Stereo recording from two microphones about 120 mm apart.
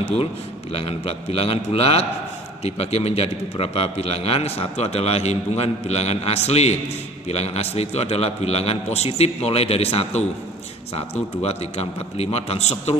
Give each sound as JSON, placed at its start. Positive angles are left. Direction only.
{"t": 0.7, "sound": "a man's voice", "side_deg": 55}